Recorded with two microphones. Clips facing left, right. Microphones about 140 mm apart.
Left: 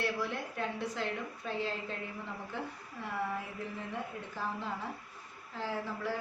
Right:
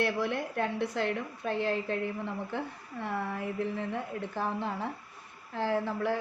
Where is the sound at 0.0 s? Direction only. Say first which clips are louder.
Right 5 dB; 60° right (ahead or behind).